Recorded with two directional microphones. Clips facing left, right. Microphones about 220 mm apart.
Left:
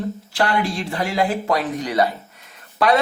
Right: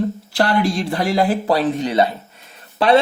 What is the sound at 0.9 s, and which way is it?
A man's voice, 35° right (ahead or behind).